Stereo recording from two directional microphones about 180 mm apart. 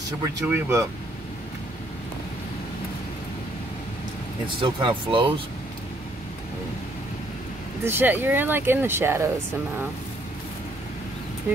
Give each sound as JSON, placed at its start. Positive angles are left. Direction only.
{"t": 0.5, "sound": "speech", "side_deg": -15}
{"t": 4.6, "sound": "speech", "side_deg": -30}
{"t": 7.8, "sound": "speech", "side_deg": -10}